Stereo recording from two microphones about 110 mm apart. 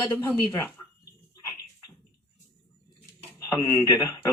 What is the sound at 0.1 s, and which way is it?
Speech, 20° left (ahead or behind).